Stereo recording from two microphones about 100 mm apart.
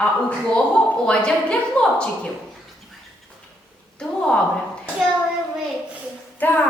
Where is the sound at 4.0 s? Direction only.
10° left (ahead or behind).